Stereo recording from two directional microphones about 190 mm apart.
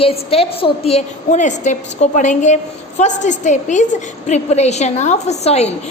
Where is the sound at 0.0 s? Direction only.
30° left (ahead or behind).